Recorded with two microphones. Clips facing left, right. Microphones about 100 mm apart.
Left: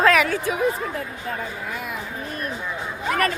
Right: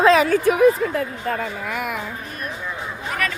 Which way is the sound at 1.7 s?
70° right (ahead or behind).